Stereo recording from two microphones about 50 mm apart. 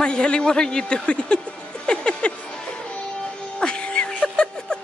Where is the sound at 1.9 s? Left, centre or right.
Centre.